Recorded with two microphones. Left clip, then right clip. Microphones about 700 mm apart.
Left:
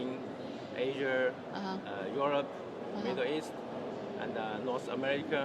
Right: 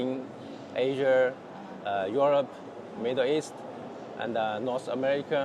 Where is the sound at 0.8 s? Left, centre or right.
Right.